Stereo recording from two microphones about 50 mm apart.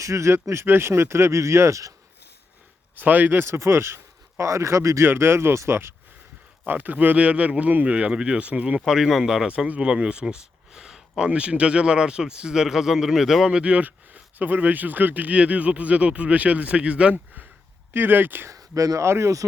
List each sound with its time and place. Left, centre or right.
0.0 s speech: right
2.9 s speech: right
3.4 s speech: right
5.0 s speech: right
6.7 s speech: right
8.9 s speech: centre
11.3 s speech: right; by 13.5 s centre
13.5 s speech: right
17.9 s speech: right
18.4 s speech: right